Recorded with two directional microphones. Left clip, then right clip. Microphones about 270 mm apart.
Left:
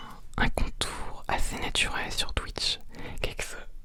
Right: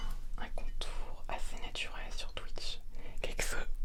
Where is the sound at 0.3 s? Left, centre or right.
Left.